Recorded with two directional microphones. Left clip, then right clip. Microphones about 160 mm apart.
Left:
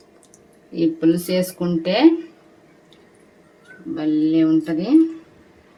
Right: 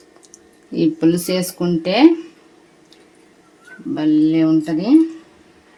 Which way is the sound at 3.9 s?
60° right (ahead or behind).